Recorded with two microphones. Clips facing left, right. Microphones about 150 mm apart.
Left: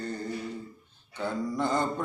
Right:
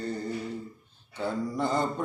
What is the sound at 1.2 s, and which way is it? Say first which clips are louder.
Mantra: even; 5° right (ahead or behind).